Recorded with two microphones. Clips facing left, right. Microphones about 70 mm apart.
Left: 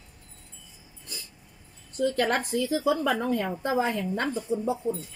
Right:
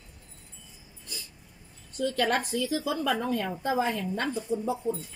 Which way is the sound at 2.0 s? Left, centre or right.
Left.